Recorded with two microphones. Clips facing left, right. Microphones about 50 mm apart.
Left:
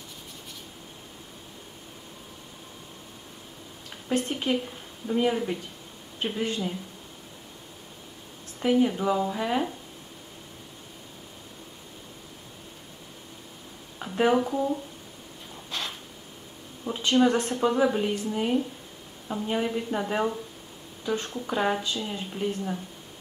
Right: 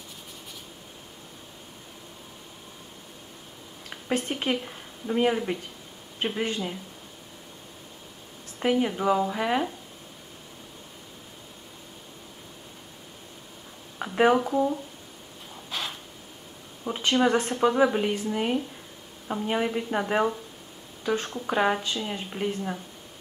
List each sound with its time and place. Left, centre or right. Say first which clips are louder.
3.9 s a woman's voice: even; right
8.5 s speech: left 2 dB; centre
13.9 s a sound: right 3 dB; right
14.3 s speech: right 1 dB; centre
15.7 s a sound: right 1 dB; centre
16.8 s speech: left 1 dB; right